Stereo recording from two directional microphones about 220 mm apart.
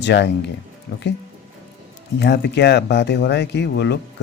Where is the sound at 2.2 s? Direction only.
50° left (ahead or behind).